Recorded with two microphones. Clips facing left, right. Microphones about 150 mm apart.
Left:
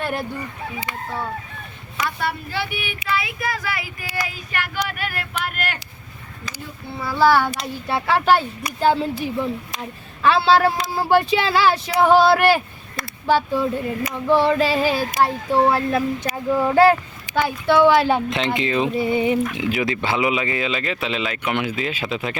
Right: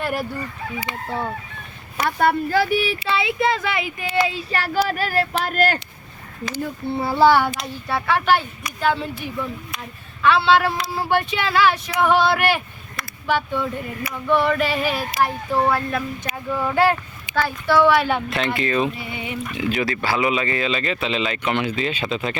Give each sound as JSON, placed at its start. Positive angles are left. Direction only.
{"t": 0.0, "sound": "fowl", "side_deg": -5}
{"t": 2.0, "sound": "speech", "side_deg": -50}
{"t": 4.9, "sound": "a sound", "side_deg": -35}
{"t": 7.0, "sound": "speech", "side_deg": -25}
{"t": 7.9, "sound": "speech", "side_deg": 25}
{"t": 16.5, "sound": "speech", "side_deg": 15}
{"t": 18.3, "sound": "speech", "side_deg": 20}
{"t": 18.9, "sound": "speech", "side_deg": 40}
{"t": 19.5, "sound": "speech", "side_deg": 20}
{"t": 20.7, "sound": "speech", "side_deg": 5}